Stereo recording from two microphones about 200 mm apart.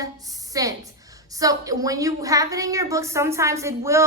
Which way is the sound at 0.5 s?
15° right (ahead or behind).